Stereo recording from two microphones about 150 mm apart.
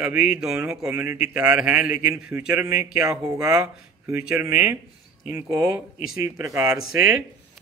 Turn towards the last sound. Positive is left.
turn(degrees=-20)  # may be behind; listen again after turning